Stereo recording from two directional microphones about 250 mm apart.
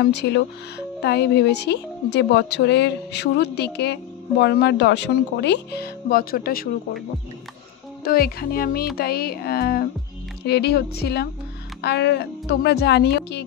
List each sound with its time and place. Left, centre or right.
0.0 s speech: left
8.0 s speech: left